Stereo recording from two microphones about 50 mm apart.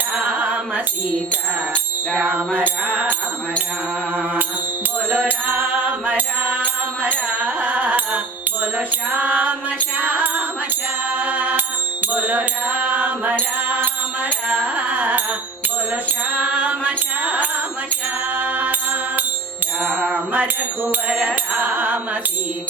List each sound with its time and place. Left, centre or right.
0.2 s music: right
1.7 s music: right
6.1 s music: right
11.1 s mantra: right
12.1 s music: right
16.4 s music: right
21.5 s music: right